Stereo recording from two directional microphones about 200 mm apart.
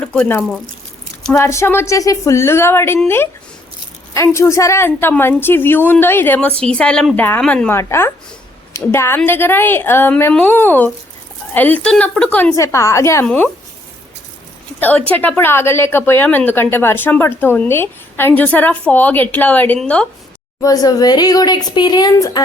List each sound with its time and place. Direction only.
0.0 s a woman's voice: 5° left (ahead or behind)
14.8 s a woman's voice: 10° left (ahead or behind)
20.6 s speech: 20° left (ahead or behind)